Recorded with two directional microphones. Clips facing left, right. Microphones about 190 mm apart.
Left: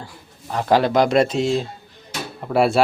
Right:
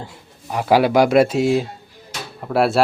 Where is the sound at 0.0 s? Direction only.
20° right (ahead or behind).